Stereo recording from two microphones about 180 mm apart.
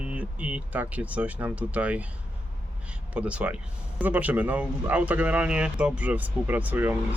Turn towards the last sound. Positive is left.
turn(degrees=-10)  # may be behind; listen again after turning